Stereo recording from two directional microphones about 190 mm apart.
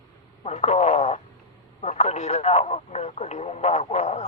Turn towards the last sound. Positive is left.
turn(degrees=35)  # may be behind; listen again after turning